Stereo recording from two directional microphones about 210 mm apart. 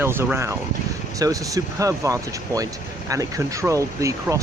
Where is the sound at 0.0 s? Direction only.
10° right (ahead or behind).